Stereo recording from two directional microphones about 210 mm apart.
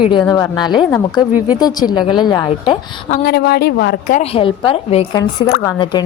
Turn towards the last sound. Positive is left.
turn(degrees=20)  # may be behind; listen again after turning